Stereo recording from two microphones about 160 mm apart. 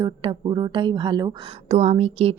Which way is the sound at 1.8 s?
40° right (ahead or behind).